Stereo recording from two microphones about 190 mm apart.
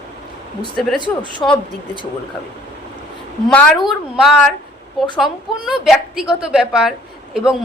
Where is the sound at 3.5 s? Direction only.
5° left (ahead or behind).